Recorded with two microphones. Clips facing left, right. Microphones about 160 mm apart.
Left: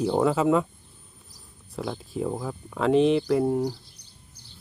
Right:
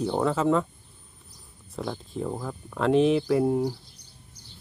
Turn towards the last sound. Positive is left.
turn(degrees=-5)  # may be behind; listen again after turning